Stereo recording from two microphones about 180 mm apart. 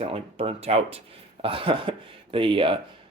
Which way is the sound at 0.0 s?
30° right (ahead or behind).